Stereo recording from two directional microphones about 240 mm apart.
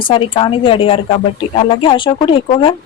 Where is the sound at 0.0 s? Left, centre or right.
Left.